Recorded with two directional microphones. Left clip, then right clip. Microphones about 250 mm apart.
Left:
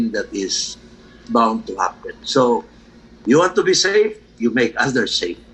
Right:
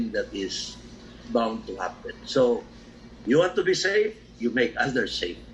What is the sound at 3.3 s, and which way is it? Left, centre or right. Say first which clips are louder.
Speech: left 7 dB; left.